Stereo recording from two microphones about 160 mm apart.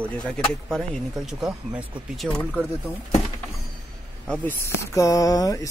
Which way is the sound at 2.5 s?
10° left (ahead or behind).